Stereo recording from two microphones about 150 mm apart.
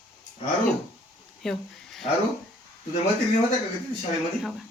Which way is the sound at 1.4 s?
Centre (ahead or behind).